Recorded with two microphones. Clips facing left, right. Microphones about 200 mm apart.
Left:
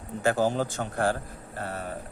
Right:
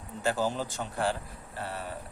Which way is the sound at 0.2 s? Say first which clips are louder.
Left 5 dB; 50° left (ahead or behind).